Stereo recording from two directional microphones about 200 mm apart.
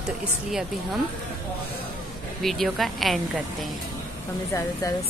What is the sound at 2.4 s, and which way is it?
Speech, centre (ahead or behind).